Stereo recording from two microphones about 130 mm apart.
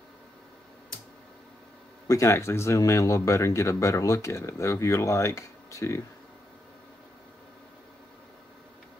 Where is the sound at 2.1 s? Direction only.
20° left (ahead or behind).